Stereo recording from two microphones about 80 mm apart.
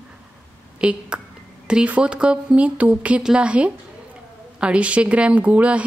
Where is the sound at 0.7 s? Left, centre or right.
Centre.